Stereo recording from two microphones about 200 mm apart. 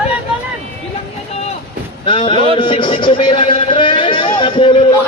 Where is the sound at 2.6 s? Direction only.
25° left (ahead or behind).